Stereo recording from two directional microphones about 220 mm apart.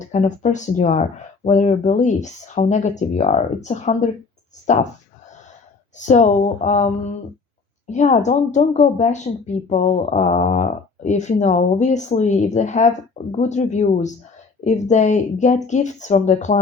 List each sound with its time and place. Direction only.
0.0 s speech: 35° left (ahead or behind)
6.0 s speech: 35° left (ahead or behind)